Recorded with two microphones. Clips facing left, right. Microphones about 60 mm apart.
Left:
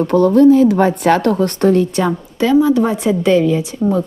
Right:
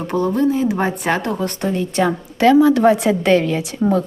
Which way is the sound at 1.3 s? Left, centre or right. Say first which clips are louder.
Left 8 dB; left.